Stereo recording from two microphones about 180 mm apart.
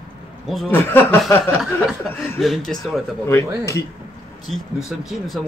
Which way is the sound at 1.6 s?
Centre (ahead or behind).